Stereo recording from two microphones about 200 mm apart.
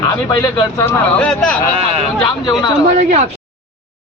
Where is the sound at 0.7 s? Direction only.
10° left (ahead or behind).